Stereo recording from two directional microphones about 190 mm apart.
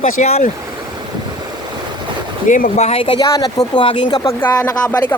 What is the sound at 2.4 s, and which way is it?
Speech, 45° left (ahead or behind).